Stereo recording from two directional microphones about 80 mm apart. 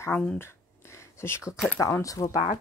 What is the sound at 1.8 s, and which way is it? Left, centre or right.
Speech, left.